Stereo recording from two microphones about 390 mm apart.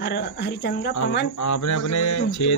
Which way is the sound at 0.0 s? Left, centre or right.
Left.